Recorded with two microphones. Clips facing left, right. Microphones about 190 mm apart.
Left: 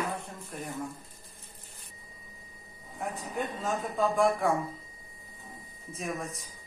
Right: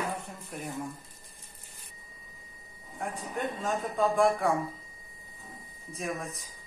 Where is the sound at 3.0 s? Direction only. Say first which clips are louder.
Even; centre (ahead or behind).